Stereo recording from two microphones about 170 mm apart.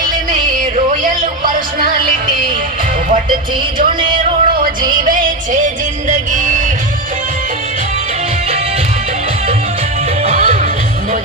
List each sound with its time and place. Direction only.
0.3 s music: 50° right (ahead or behind)
5.0 s music: 50° right (ahead or behind)
10.2 s music: 35° right (ahead or behind)